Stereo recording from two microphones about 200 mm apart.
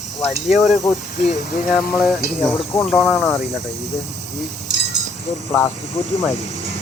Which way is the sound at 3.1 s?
15° left (ahead or behind).